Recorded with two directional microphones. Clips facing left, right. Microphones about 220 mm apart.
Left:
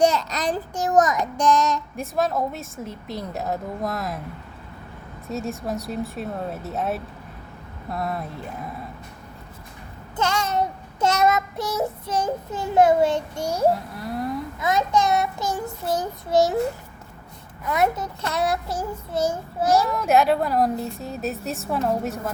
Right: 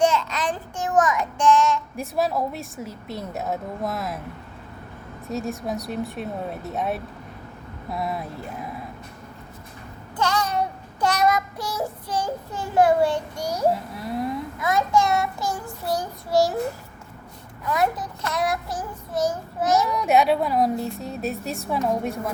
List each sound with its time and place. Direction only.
0.0 s child singing: 40° left (ahead or behind)
2.0 s speech: centre (ahead or behind)
5.3 s speech: centre (ahead or behind)
10.2 s child singing: 25° left (ahead or behind)
14.0 s speech: centre (ahead or behind)
14.6 s a child's voice: 20° left (ahead or behind)
17.7 s a child's voice: 25° left (ahead or behind)
19.9 s speech: centre (ahead or behind)